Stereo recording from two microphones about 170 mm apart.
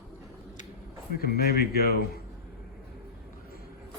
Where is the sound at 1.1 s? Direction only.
65° left (ahead or behind).